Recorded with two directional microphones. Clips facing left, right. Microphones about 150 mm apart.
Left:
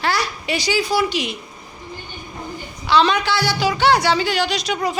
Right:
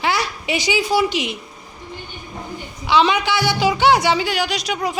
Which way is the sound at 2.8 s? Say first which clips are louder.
Even; 15° right (ahead or behind).